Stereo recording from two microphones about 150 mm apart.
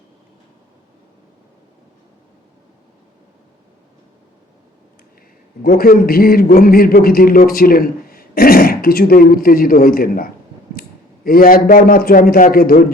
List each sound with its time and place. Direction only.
5.6 s a man's voice: 75° left (ahead or behind)